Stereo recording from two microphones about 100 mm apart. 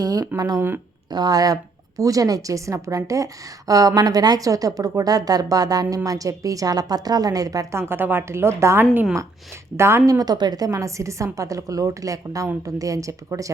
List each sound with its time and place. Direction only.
0.0 s speech: 40° right (ahead or behind)
10.2 s speech: 45° right (ahead or behind)